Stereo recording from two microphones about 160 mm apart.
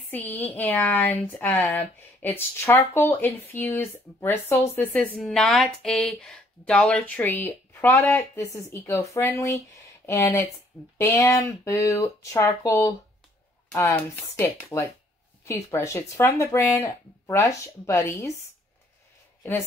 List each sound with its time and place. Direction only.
0.1 s speech: 10° left (ahead or behind)